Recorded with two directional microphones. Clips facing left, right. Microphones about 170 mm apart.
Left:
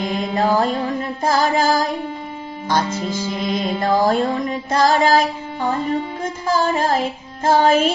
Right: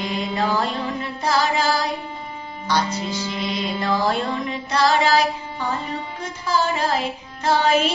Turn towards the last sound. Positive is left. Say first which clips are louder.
# left 4 dB
turn(degrees=45)  # may be behind; listen again after turning